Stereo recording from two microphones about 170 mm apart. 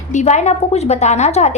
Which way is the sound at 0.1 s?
45° left (ahead or behind).